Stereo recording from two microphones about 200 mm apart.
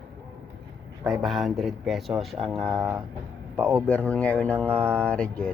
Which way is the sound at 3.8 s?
5° left (ahead or behind).